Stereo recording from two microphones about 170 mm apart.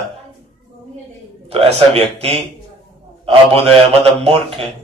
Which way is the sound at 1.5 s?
35° right (ahead or behind).